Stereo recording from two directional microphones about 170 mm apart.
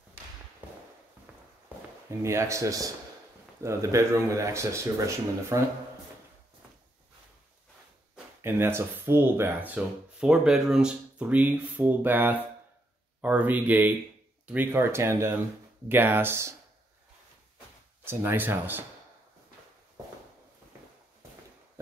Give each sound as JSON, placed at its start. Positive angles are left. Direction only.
{"t": 2.0, "sound": "speech", "side_deg": -15}
{"t": 8.4, "sound": "speech", "side_deg": -15}
{"t": 18.0, "sound": "speech", "side_deg": -10}